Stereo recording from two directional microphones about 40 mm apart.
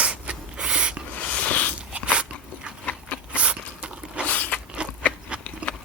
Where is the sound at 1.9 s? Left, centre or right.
Right.